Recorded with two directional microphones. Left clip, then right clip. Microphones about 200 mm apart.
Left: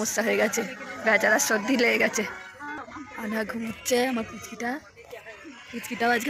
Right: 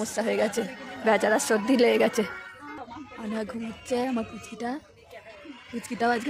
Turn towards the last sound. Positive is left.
turn(degrees=-10)  # may be behind; listen again after turning